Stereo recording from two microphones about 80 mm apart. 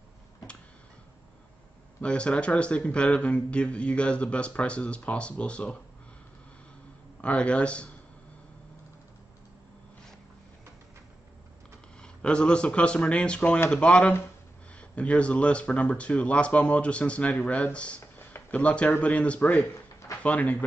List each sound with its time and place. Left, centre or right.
2.0 s a man's voice: centre
7.2 s a man's voice: centre
12.0 s a man's voice: centre
18.0 s a sound: left
18.5 s a man's voice: centre